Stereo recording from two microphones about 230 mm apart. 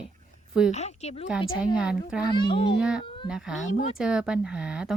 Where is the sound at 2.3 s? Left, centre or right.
Centre.